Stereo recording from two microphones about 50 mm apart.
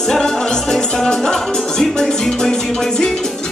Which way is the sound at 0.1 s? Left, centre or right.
Centre.